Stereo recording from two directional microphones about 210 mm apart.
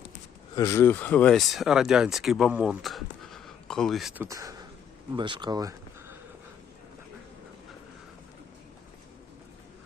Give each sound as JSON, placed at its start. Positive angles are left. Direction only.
{"t": 0.5, "sound": "speech", "side_deg": 15}